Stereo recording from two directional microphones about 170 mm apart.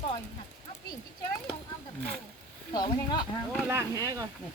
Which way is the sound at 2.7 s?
25° left (ahead or behind).